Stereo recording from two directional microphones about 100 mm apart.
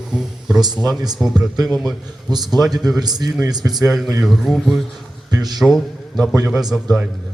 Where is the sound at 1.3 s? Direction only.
40° right (ahead or behind).